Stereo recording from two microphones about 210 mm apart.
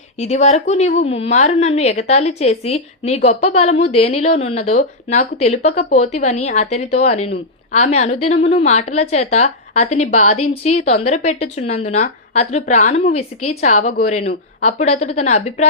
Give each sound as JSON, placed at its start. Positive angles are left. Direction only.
{"t": 0.2, "sound": "a woman's voice", "side_deg": 30}